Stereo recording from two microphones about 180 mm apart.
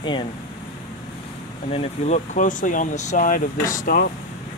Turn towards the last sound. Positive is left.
turn(degrees=50)  # may be behind; listen again after turning